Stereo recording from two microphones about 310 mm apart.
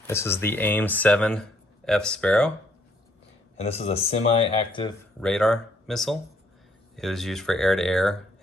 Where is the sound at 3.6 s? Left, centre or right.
Centre.